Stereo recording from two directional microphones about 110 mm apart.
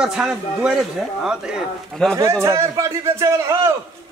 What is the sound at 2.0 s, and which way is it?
Speech, 5° left (ahead or behind).